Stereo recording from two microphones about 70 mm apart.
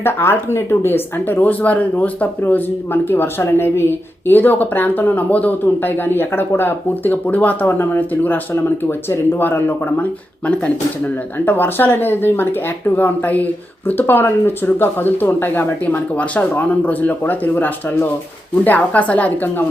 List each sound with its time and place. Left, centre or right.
0.0 s speech: left